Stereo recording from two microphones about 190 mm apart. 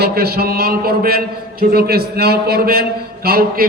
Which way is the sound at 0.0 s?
55° right (ahead or behind).